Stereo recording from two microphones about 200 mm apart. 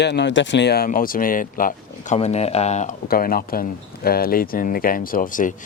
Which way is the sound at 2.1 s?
30° left (ahead or behind).